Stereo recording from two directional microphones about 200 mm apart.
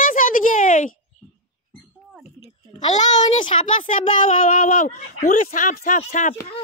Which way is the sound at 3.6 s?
40° left (ahead or behind).